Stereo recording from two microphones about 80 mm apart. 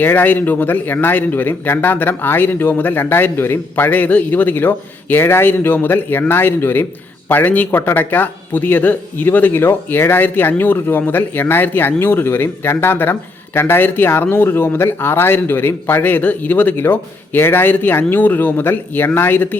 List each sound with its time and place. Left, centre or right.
0.0 s a man's voice: left